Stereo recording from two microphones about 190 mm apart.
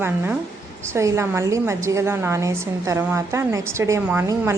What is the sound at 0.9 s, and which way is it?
A woman's voice, 15° right (ahead or behind).